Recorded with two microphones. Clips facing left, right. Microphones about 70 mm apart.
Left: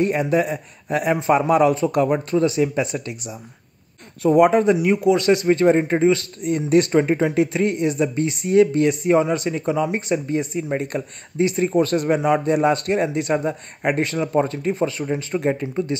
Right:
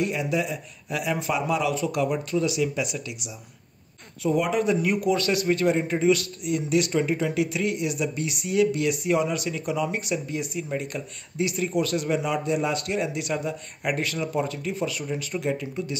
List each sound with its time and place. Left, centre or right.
0.0 s a man's voice: left
4.8 s a man's voice: left